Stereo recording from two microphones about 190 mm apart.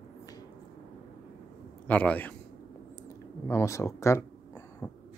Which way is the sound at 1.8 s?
10° left (ahead or behind).